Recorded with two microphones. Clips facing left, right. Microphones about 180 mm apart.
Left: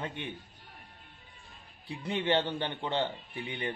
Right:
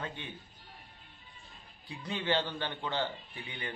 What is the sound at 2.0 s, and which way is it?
A man's voice, 25° left (ahead or behind).